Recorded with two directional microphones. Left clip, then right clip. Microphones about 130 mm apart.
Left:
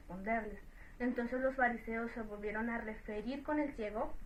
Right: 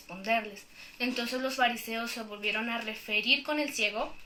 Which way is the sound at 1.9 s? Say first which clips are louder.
Right 6 dB; 35° right (ahead or behind).